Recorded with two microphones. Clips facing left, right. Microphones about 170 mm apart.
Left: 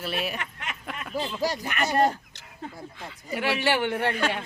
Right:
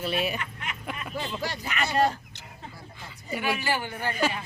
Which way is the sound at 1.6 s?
50° left (ahead or behind).